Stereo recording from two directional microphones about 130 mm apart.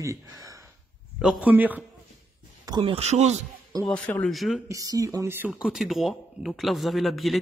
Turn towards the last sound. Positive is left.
turn(degrees=0)  # may be behind; listen again after turning